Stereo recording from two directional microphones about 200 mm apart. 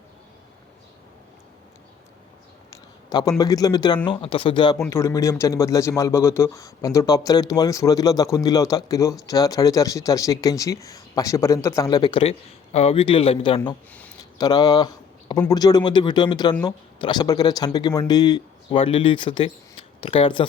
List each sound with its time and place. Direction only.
2.6 s speech: 20° left (ahead or behind)
13.6 s speech: 10° left (ahead or behind); by 20.4 s 25° left (ahead or behind)